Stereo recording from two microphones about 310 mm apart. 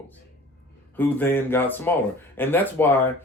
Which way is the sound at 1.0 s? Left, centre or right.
Centre.